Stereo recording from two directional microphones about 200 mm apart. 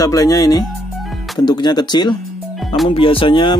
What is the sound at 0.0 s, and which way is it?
Speech, 15° left (ahead or behind).